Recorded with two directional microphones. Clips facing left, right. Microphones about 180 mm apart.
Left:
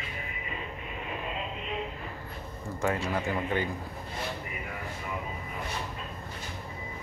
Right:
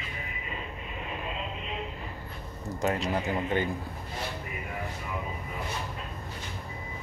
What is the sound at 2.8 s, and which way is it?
Speech, 20° right (ahead or behind).